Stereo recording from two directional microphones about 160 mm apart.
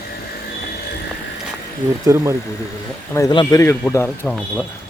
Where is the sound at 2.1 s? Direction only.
15° right (ahead or behind).